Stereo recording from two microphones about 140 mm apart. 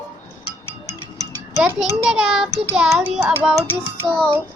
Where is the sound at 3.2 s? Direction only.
10° right (ahead or behind).